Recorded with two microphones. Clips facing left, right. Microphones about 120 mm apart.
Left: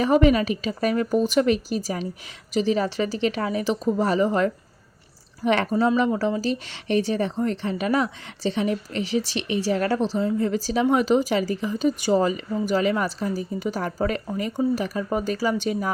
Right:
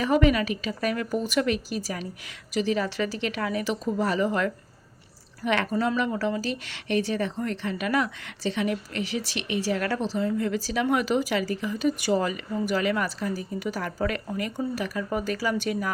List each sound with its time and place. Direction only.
0.0 s speech: 35° left (ahead or behind)
5.7 s speech: 20° left (ahead or behind)